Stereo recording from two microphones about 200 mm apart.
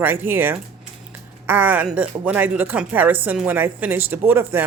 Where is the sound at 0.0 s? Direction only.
10° right (ahead or behind).